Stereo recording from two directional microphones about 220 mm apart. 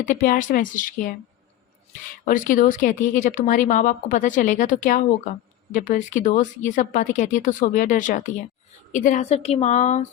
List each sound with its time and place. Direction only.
0.0 s speech: 35° left (ahead or behind)
2.2 s speech: 35° left (ahead or behind)